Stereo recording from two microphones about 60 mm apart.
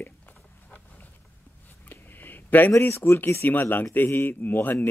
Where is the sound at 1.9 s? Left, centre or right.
Left.